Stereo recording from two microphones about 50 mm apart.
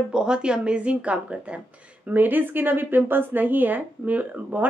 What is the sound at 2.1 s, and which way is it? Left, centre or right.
A woman's voice, right.